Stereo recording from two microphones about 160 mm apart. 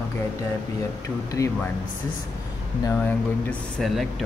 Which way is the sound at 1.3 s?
20° left (ahead or behind).